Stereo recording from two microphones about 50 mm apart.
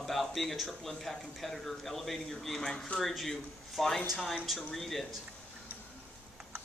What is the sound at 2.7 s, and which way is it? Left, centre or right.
Speech, left.